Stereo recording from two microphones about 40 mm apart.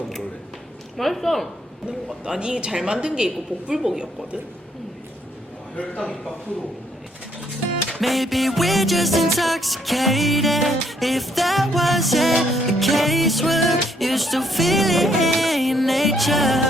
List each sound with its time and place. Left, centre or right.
0.9 s music: centre
2.2 s a woman's voice: right
8.0 s music: centre